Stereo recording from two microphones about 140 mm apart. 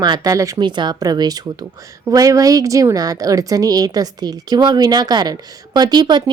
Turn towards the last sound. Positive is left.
turn(degrees=-30)  # may be behind; listen again after turning